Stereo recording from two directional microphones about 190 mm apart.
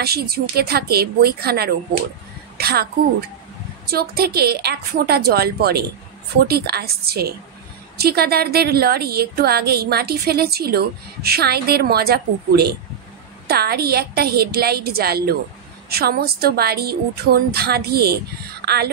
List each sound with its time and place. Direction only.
0.0 s a woman's voice: 55° right (ahead or behind)
3.9 s a woman's voice: 55° right (ahead or behind)